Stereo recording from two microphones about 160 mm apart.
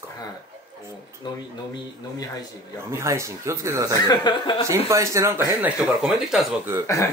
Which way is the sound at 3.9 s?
25° left (ahead or behind).